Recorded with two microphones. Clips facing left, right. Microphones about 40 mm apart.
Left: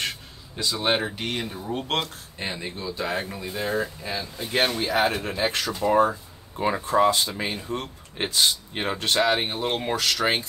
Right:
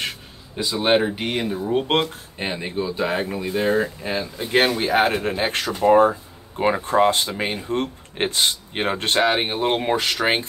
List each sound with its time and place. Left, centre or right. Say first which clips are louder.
0.6 s speech: right 5 dB; centre